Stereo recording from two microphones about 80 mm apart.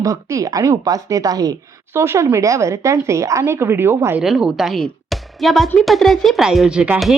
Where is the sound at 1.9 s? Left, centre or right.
Right.